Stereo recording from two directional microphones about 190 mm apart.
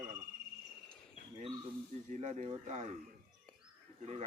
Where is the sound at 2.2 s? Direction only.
40° right (ahead or behind).